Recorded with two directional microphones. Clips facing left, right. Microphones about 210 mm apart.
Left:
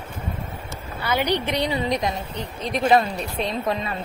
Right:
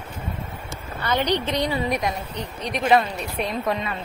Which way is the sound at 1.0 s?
10° left (ahead or behind).